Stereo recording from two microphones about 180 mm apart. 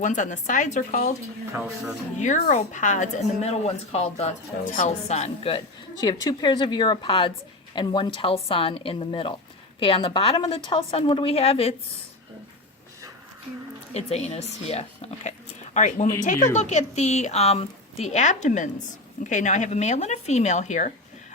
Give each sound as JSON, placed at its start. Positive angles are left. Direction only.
{"t": 0.0, "sound": "a woman's voice", "side_deg": 45}
{"t": 2.1, "sound": "a woman's voice", "side_deg": 45}
{"t": 13.9, "sound": "a woman's voice", "side_deg": 35}